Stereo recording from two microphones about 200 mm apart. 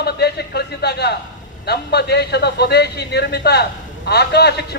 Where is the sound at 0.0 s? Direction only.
55° left (ahead or behind).